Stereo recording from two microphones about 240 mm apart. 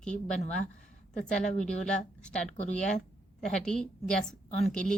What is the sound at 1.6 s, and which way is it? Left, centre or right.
Speech, centre.